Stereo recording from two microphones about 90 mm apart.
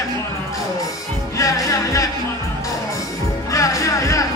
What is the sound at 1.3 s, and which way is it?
Music, 40° left (ahead or behind).